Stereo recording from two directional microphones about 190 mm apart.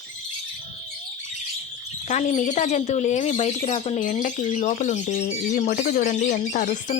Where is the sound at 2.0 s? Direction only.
35° left (ahead or behind).